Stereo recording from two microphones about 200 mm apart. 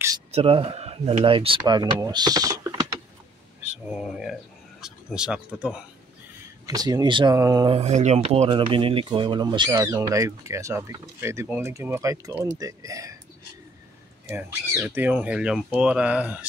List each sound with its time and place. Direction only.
0.3 s speech: 30° right (ahead or behind)
3.9 s speech: centre (ahead or behind)
6.6 s speech: 20° right (ahead or behind)
14.3 s speech: 10° right (ahead or behind)